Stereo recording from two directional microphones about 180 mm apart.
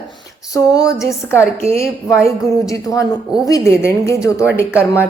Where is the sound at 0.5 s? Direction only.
20° left (ahead or behind).